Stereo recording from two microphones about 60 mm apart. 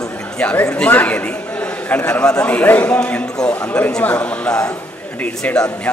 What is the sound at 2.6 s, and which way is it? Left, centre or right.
Speech, left.